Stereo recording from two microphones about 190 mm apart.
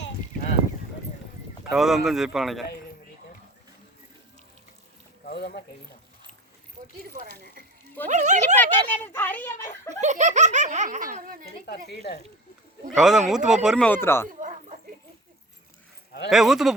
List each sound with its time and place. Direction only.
1.7 s speech: centre (ahead or behind)
5.2 s speech: 55° left (ahead or behind)
7.3 s speech: 60° right (ahead or behind)
8.1 s speech: 40° right (ahead or behind)
8.5 s speech: 10° left (ahead or behind)
10.0 s speech: 40° right (ahead or behind)
11.6 s speech: 55° left (ahead or behind)
13.0 s speech: centre (ahead or behind)
14.3 s dog: 40° right (ahead or behind)
16.3 s speech: centre (ahead or behind)